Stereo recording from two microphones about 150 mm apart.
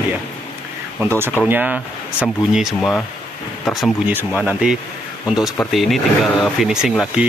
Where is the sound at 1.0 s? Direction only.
15° right (ahead or behind).